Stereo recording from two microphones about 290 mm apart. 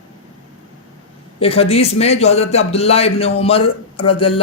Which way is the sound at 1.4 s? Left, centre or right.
Centre.